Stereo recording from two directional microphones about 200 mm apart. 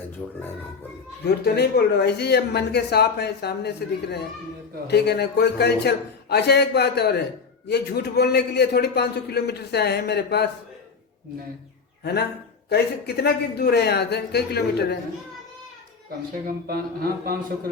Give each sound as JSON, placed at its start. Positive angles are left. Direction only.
{"t": 0.2, "sound": "speech", "side_deg": 5}
{"t": 1.2, "sound": "speech", "side_deg": 55}
{"t": 12.6, "sound": "speech", "side_deg": 55}
{"t": 16.6, "sound": "speech", "side_deg": -50}